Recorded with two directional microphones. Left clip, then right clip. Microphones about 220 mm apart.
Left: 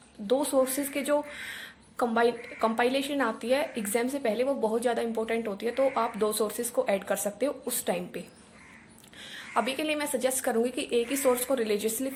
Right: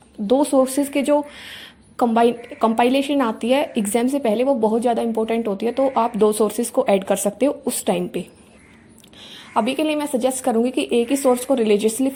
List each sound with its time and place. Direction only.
0.3 s speech: 25° right (ahead or behind)
9.2 s speech: 20° right (ahead or behind)